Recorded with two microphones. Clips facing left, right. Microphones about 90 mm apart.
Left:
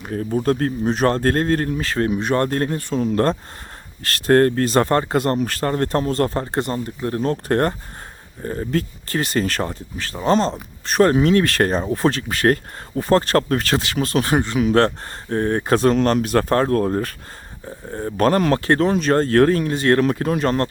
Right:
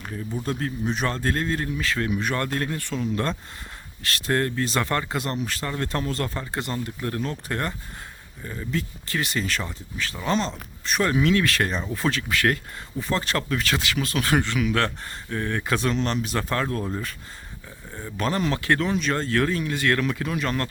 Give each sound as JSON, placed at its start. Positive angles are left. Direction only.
{"t": 0.1, "sound": "speech", "side_deg": 60}
{"t": 7.3, "sound": "speech", "side_deg": 50}
{"t": 13.0, "sound": "speech", "side_deg": 45}
{"t": 17.7, "sound": "speech", "side_deg": 40}
{"t": 18.6, "sound": "speech", "side_deg": 35}